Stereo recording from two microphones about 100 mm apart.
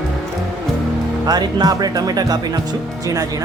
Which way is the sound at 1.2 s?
40° right (ahead or behind).